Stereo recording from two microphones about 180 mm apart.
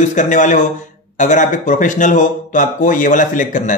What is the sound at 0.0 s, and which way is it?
A man's voice, 45° left (ahead or behind).